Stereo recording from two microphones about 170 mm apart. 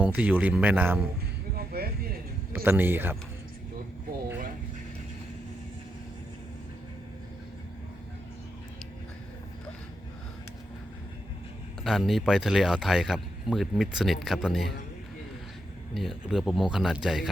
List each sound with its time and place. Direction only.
0.0 s speech: 10° right (ahead or behind)
1.5 s a sound: 60° right (ahead or behind)
2.5 s speech: 10° right (ahead or behind)
11.8 s speech: centre (ahead or behind)
16.0 s speech: centre (ahead or behind)